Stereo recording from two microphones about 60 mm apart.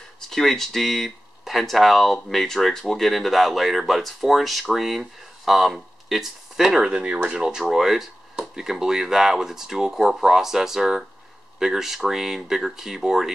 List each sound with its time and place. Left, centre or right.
0.3 s speech: centre
6.9 s speech: centre